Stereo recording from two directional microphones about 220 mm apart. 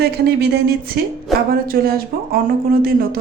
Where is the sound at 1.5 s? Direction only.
40° right (ahead or behind).